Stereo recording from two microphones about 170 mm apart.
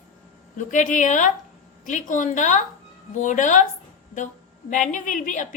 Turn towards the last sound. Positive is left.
turn(degrees=50)  # may be behind; listen again after turning